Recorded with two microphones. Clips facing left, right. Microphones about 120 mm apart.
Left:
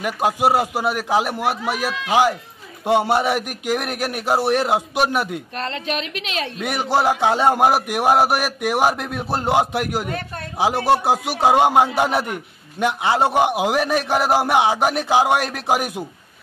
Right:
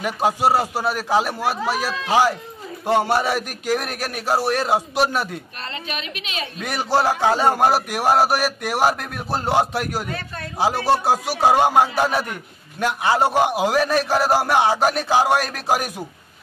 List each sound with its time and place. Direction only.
0.0 s a man's voice: 10° left (ahead or behind)
6.6 s a man's voice: 15° left (ahead or behind)